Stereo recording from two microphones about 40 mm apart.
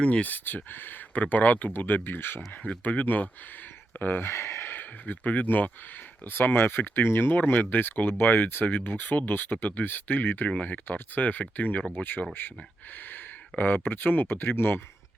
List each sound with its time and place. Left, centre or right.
0.0 s speech: left
0.3 s speech: left
1.8 s speech: left
2.8 s speech: left
3.9 s speech: left
4.3 s speech: left
6.2 s speech: left
12.4 s speech: left